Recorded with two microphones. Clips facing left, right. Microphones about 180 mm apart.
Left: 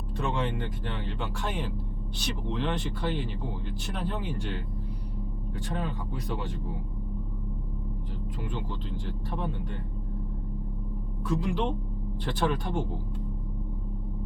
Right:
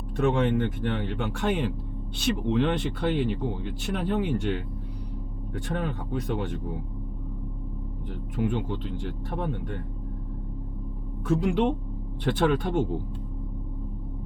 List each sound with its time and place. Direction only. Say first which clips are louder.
0.3 s speech: right 7 dB; 55° right (ahead or behind)
5.8 s speech: right 4 dB; 55° right (ahead or behind)
8.4 s speech: right 10 dB; 65° right (ahead or behind)
11.3 s speech: right 5 dB; 60° right (ahead or behind)